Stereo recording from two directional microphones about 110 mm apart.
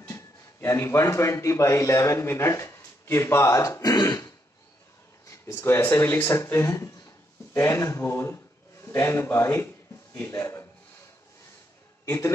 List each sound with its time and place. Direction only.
0.1 s a man's voice: 25° left (ahead or behind)